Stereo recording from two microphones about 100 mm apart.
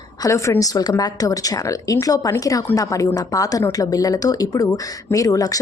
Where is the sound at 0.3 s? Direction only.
30° left (ahead or behind).